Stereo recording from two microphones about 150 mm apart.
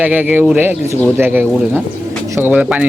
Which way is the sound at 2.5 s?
5° right (ahead or behind).